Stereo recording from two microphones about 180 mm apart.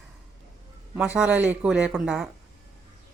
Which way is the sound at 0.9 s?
10° right (ahead or behind).